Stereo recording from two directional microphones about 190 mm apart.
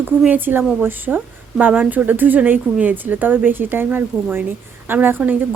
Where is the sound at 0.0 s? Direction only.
10° right (ahead or behind).